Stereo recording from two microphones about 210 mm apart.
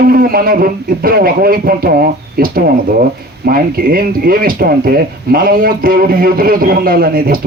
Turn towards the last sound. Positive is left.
turn(degrees=-45)  # may be behind; listen again after turning